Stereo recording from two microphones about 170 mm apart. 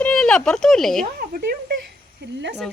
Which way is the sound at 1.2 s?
60° right (ahead or behind).